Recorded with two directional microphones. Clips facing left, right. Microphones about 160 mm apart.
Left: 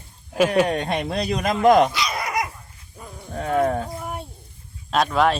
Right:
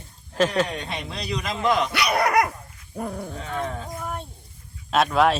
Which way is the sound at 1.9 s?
65° right (ahead or behind).